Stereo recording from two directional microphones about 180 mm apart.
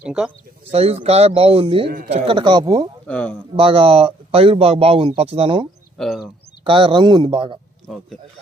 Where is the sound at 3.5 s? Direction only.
30° right (ahead or behind).